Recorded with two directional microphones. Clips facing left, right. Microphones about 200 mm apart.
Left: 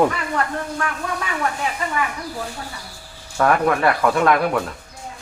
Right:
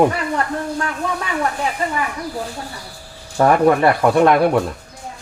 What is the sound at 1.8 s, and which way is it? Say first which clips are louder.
Speech: right 4 dB; 35° right (ahead or behind).